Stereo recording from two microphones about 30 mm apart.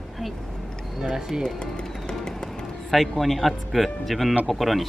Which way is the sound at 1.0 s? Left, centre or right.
Centre.